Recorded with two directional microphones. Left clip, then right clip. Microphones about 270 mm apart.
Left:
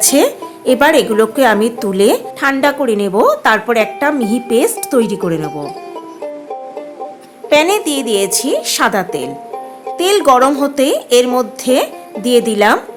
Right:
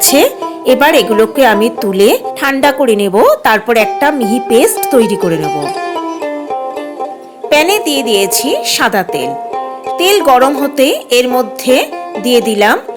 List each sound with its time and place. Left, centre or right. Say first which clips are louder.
0.0 s speech: right 3 dB; centre
5.4 s speech: right 7 dB; right
7.5 s speech: right 2 dB; centre